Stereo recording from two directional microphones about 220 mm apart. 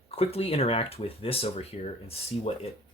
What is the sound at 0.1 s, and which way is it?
Speech, 25° left (ahead or behind).